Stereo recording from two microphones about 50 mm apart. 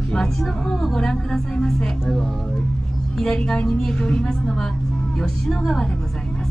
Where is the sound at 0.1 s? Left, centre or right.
Centre.